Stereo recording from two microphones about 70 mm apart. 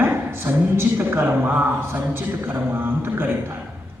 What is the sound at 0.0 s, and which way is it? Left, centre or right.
A woman's voice, right.